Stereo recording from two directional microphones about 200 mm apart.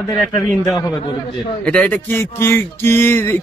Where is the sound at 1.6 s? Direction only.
5° left (ahead or behind).